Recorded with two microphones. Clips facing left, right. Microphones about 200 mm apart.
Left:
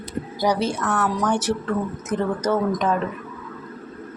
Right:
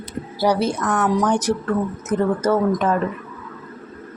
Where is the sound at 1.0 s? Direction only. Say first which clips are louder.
Right 5 dB; 20° right (ahead or behind).